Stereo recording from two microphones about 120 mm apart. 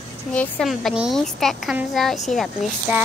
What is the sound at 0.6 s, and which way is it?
A woman's voice, centre (ahead or behind).